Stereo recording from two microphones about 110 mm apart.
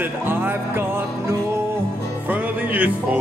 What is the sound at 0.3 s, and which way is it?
Music, 20° right (ahead or behind).